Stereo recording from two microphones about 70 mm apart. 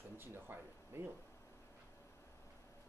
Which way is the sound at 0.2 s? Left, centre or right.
Right.